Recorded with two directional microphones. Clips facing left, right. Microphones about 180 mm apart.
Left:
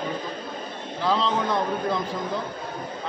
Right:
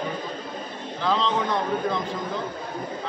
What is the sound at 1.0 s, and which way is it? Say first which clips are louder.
Speech: even; 5° left (ahead or behind).